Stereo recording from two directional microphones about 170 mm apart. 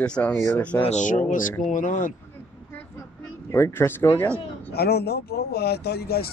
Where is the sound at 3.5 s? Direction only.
15° left (ahead or behind).